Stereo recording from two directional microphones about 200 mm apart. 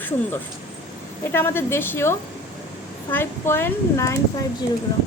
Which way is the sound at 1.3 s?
10° left (ahead or behind).